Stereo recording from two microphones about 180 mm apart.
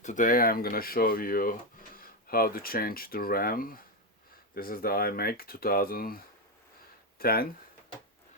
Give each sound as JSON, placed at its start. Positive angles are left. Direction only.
{"t": 0.0, "sound": "speech", "side_deg": 45}
{"t": 7.2, "sound": "speech", "side_deg": 55}